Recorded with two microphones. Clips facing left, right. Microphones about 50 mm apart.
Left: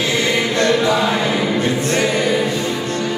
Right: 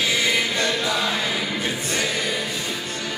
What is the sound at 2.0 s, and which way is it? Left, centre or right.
Music, centre.